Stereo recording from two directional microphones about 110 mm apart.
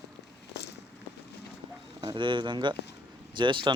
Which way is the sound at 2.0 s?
50° right (ahead or behind).